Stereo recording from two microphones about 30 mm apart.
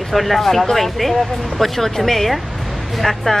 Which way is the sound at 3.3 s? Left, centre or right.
Left.